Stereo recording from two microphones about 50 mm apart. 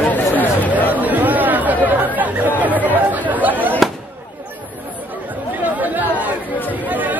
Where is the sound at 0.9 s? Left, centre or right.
Right.